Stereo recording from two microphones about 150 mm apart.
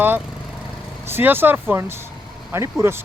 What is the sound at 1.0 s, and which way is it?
Speech, 15° right (ahead or behind).